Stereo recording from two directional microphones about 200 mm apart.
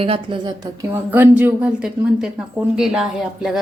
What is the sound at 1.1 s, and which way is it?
A woman's voice, 10° right (ahead or behind).